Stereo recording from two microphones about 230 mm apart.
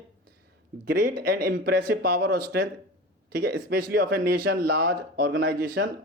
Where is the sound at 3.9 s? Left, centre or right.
Right.